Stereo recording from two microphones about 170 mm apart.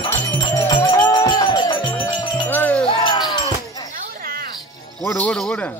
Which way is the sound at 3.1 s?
25° left (ahead or behind).